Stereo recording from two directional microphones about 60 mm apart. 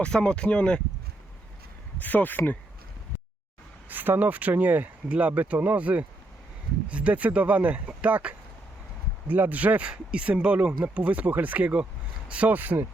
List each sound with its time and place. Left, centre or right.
0.0 s speech: centre
2.0 s speech: left
3.8 s speech: right